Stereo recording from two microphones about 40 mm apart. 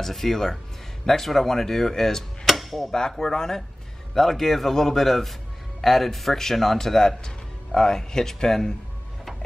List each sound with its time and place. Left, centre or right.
0.0 s speech: centre
2.5 s a sound: centre
2.9 s speech: centre